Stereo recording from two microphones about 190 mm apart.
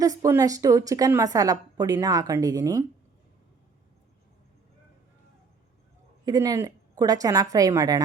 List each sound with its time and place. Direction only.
0.0 s a woman's voice: 15° right (ahead or behind)
6.2 s a woman's voice: 20° right (ahead or behind)